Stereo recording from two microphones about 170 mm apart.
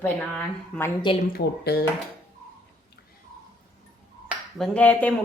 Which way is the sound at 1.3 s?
65° left (ahead or behind).